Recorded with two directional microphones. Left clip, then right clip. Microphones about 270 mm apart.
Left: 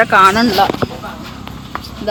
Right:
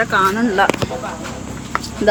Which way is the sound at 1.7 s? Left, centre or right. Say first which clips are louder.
Right 4 dB; centre.